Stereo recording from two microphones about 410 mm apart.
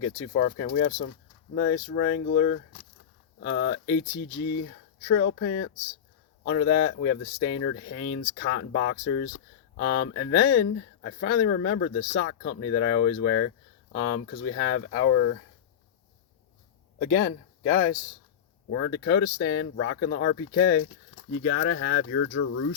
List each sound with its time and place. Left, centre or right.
0.3 s speech: left
5.0 s speech: left
17.0 s speech: left